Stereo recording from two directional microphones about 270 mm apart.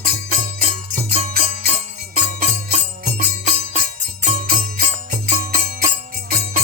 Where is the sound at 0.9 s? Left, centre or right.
Right.